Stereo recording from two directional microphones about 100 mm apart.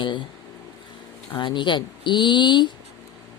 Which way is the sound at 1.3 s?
50° left (ahead or behind).